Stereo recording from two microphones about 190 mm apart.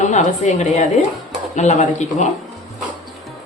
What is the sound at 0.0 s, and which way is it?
A woman's voice, 40° left (ahead or behind).